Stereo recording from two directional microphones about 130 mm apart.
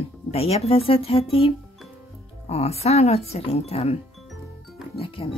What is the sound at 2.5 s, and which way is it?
Speech, 50° left (ahead or behind).